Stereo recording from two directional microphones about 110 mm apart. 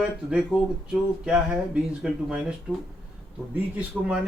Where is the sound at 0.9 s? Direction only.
5° right (ahead or behind).